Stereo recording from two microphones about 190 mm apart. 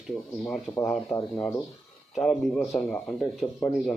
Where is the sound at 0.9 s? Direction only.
20° left (ahead or behind).